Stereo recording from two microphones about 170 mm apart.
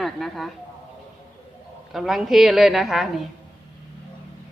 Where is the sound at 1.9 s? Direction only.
Centre (ahead or behind).